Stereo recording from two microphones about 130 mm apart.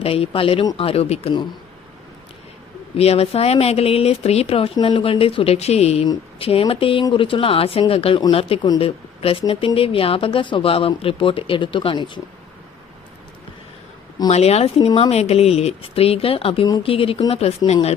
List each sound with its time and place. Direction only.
0.0 s speech: 50° left (ahead or behind)
3.0 s speech: 50° left (ahead or behind)
14.3 s speech: 55° left (ahead or behind)